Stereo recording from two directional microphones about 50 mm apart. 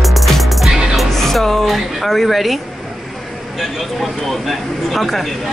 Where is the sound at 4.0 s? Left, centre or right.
Centre.